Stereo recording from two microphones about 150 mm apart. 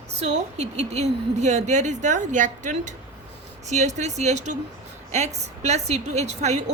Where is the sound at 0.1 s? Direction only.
45° right (ahead or behind).